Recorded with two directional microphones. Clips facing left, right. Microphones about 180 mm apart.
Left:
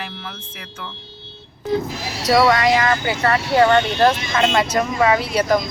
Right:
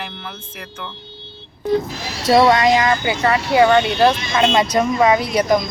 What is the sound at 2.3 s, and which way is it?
Speech, 25° right (ahead or behind).